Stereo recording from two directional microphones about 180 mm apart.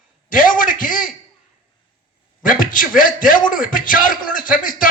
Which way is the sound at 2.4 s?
50° left (ahead or behind).